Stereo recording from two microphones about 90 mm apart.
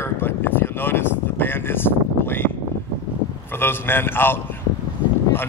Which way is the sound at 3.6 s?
25° left (ahead or behind).